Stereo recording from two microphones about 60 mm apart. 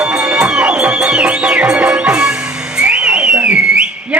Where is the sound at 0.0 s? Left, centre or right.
Centre.